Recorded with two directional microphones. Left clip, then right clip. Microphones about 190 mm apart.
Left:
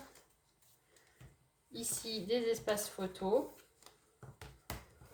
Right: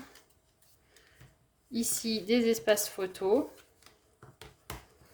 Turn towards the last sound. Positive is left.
turn(degrees=-55)  # may be behind; listen again after turning